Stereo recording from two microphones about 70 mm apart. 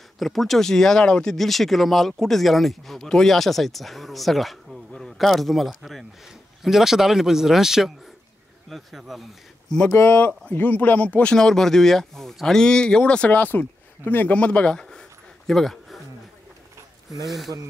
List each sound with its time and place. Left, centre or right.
0.2 s speech: centre
10.1 s speech: left
11.3 s speech: centre; by 14.3 s left
14.3 s a sound: centre
17.3 s speech: centre